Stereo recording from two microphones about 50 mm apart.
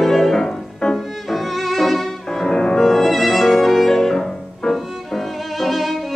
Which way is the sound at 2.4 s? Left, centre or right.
Centre.